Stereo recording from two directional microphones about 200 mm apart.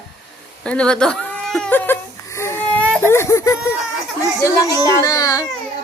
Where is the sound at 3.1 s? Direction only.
15° left (ahead or behind).